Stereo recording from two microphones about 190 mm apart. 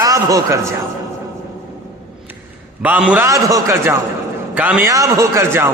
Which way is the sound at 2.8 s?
10° right (ahead or behind).